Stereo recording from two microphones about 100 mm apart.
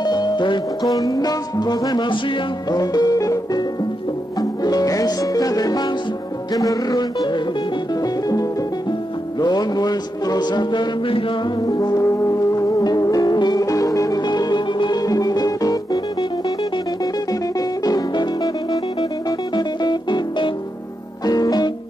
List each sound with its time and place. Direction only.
0.0 s music: 45° left (ahead or behind)
0.9 s music: 35° left (ahead or behind)
2.7 s music: 40° left (ahead or behind)
12.0 s music: 30° left (ahead or behind)
17.0 s music: 40° left (ahead or behind)
21.3 s music: 40° left (ahead or behind)